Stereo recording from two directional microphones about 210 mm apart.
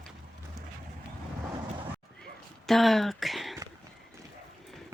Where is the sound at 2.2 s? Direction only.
Centre (ahead or behind).